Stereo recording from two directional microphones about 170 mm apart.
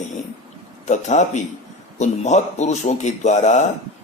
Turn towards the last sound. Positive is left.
turn(degrees=45)  # may be behind; listen again after turning